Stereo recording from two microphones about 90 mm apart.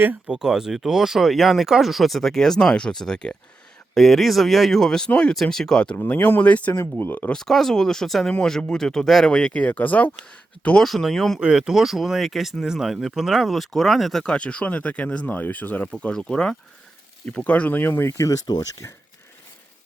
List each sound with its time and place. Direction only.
0.3 s speech: 5° right (ahead or behind)
6.0 s speech: 20° left (ahead or behind)
7.3 s speech: 5° left (ahead or behind)
10.8 s speech: centre (ahead or behind)
11.3 s speech: 10° right (ahead or behind); by 18.3 s 25° left (ahead or behind)
18.3 s speech: 50° left (ahead or behind)
18.8 s speech: 35° left (ahead or behind)